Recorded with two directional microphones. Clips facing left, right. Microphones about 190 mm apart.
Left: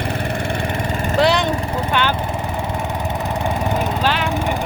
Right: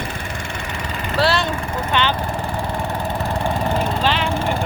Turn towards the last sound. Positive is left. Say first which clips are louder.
# even
turn(degrees=5)  # may be behind; listen again after turning